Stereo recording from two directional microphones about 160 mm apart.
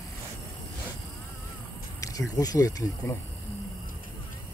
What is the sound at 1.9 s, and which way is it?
Speech, 20° left (ahead or behind).